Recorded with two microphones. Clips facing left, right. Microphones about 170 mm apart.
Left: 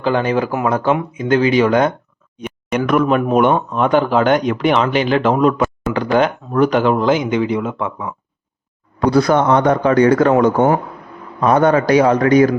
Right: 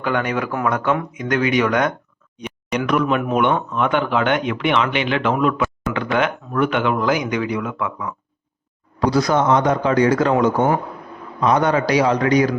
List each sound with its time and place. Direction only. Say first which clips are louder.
0.0 s speech: left 5 dB; 30° left (ahead or behind)
2.4 s speech: left 4 dB; 50° left (ahead or behind)
3.2 s speech: left 5 dB; 35° left (ahead or behind)
9.0 s a man's voice: left 4 dB; 60° left (ahead or behind)